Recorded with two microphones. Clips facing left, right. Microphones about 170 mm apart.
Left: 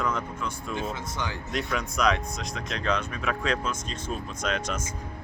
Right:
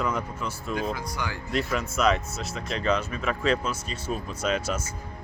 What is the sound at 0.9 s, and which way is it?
Speech, 20° left (ahead or behind).